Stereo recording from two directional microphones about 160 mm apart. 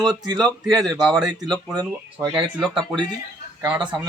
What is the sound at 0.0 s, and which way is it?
Speech, 25° right (ahead or behind).